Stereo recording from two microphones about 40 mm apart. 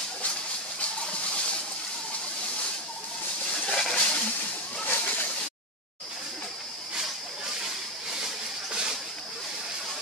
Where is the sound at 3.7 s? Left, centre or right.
Centre.